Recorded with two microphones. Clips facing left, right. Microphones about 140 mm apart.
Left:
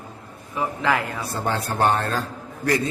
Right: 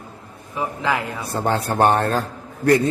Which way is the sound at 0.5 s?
20° right (ahead or behind).